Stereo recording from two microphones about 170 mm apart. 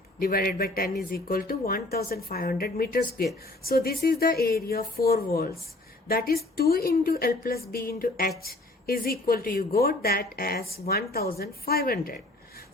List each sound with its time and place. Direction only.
0.2 s a woman's voice: 60° left (ahead or behind)